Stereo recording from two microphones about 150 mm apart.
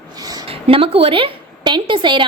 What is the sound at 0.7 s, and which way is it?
A woman's voice, 40° right (ahead or behind).